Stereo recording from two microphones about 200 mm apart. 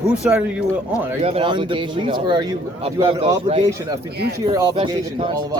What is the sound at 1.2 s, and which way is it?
Speech, 30° right (ahead or behind).